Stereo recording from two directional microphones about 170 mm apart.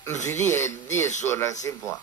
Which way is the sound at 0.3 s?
15° left (ahead or behind).